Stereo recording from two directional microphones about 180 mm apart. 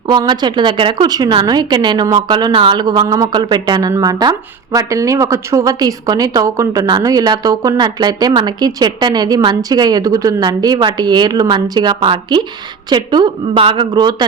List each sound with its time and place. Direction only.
0.1 s a woman's voice: 25° right (ahead or behind)